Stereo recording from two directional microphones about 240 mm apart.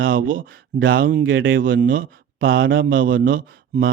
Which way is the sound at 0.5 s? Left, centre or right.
Right.